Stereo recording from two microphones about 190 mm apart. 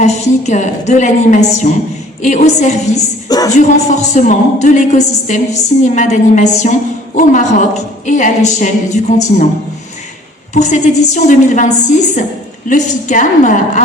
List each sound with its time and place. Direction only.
0.0 s a woman's voice: 40° left (ahead or behind)
3.2 s speech: 20° left (ahead or behind)
3.5 s a woman's voice: 40° left (ahead or behind)
10.5 s a woman's voice: 40° left (ahead or behind)